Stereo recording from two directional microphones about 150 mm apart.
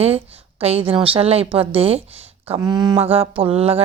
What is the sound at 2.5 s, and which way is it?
Speech, 25° right (ahead or behind).